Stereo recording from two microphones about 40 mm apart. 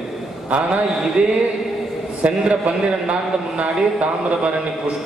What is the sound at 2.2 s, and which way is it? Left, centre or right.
A man's voice, right.